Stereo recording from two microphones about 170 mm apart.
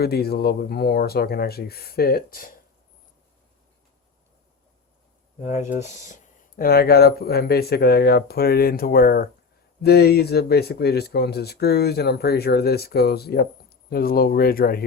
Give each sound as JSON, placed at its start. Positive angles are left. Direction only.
{"t": 0.0, "sound": "speech", "side_deg": 65}
{"t": 5.4, "sound": "speech", "side_deg": 45}